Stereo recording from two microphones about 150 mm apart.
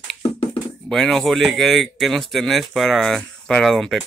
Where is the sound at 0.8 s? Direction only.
Centre (ahead or behind).